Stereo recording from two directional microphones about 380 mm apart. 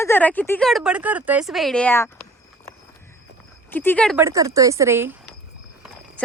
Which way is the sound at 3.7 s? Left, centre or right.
Centre.